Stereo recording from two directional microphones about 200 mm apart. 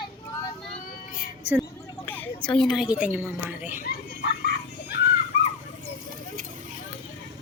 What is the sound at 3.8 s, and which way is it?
Speech, 50° left (ahead or behind).